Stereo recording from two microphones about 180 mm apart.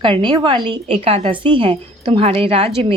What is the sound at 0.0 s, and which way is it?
A woman's voice, 25° right (ahead or behind).